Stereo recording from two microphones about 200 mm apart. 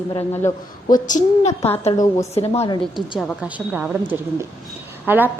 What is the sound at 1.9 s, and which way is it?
Speech, 15° left (ahead or behind).